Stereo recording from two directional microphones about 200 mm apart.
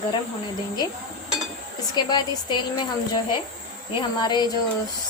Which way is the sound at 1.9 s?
20° left (ahead or behind).